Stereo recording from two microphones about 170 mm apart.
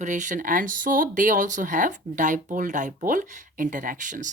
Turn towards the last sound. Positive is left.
turn(degrees=-50)  # may be behind; listen again after turning